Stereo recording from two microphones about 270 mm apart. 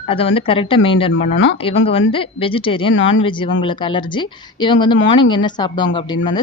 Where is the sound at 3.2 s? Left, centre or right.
Centre.